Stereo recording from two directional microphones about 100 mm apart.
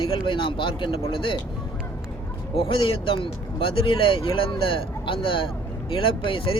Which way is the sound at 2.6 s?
60° left (ahead or behind).